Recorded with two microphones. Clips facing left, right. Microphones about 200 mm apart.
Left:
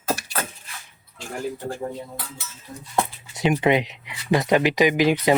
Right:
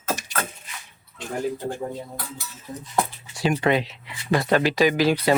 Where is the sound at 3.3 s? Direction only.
20° left (ahead or behind).